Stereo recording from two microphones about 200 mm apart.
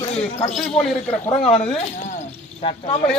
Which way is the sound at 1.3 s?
30° left (ahead or behind).